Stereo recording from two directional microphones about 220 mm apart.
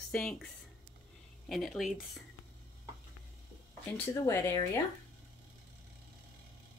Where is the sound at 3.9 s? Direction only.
10° left (ahead or behind).